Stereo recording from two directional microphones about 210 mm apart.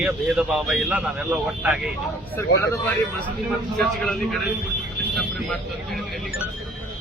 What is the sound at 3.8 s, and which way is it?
Speech, centre (ahead or behind).